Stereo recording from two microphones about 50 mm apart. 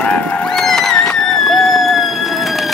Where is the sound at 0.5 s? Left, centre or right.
Centre.